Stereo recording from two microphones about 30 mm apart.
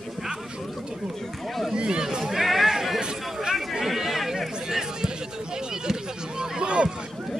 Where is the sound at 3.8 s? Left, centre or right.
Centre.